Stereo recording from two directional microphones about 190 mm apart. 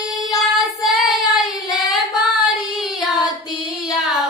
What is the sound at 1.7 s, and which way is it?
Singing, centre (ahead or behind).